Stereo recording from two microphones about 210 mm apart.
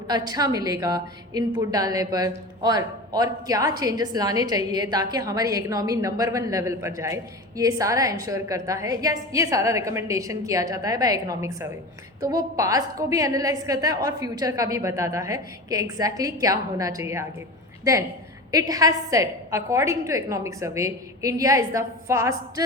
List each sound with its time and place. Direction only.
0.1 s a woman's voice: 20° right (ahead or behind)
18.5 s a woman's voice: 15° right (ahead or behind)